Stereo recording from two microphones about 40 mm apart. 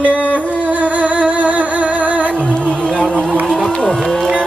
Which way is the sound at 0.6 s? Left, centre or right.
Right.